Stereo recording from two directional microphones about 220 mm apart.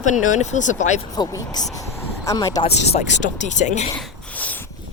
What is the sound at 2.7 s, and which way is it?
Speech, 30° left (ahead or behind).